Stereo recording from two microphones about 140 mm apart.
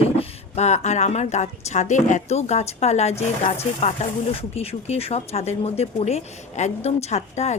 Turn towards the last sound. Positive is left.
turn(degrees=50)  # may be behind; listen again after turning